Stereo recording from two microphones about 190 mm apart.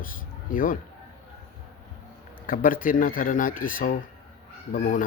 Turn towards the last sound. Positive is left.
turn(degrees=45)  # may be behind; listen again after turning